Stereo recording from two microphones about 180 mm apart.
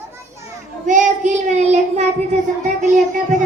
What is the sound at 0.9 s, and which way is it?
Child singing, 45° right (ahead or behind).